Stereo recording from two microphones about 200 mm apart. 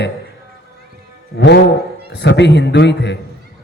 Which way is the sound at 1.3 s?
55° left (ahead or behind).